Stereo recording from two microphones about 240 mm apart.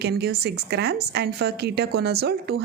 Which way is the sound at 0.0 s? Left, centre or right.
Right.